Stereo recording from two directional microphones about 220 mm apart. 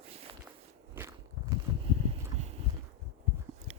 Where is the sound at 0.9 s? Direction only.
10° right (ahead or behind).